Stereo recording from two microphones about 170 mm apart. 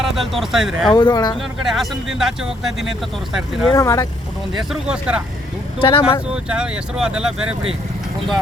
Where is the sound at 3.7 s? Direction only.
20° left (ahead or behind).